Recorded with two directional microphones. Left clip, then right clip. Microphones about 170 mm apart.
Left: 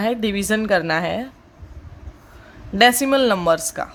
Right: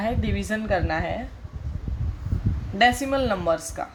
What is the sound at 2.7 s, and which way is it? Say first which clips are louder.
Speech: left 5 dB; 50° left (ahead or behind).